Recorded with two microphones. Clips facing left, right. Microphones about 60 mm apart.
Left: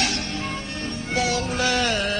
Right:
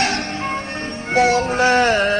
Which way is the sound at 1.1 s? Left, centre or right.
Right.